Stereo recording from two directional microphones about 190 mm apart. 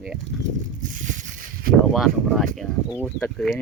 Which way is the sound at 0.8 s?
45° right (ahead or behind).